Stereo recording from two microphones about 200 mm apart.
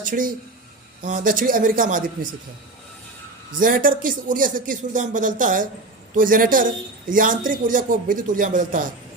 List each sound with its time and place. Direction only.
0.0 s a man's voice: 40° right (ahead or behind)
3.6 s a woman's voice: 45° right (ahead or behind)